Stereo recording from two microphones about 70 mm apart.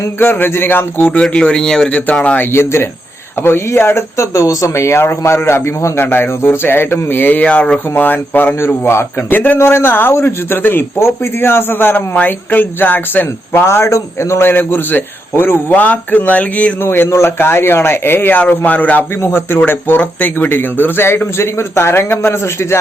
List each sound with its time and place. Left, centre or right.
0.2 s a man's voice: left; by 2.0 s centre
2.2 s a man's voice: left
2.5 s a man's voice: left
7.4 s a man's voice: centre
8.5 s a man's voice: left
9.3 s a man's voice: left
9.6 s a man's voice: left
16.8 s a man's voice: left